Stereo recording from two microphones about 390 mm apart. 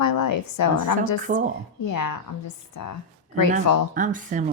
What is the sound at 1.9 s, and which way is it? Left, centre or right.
Speech, left.